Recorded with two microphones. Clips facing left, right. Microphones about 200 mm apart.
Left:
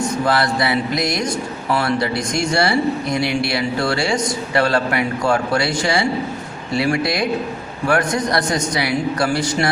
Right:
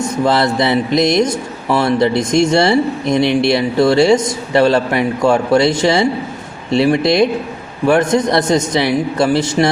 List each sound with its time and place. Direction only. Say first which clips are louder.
0.3 s speech: right 6 dB; 25° right (ahead or behind)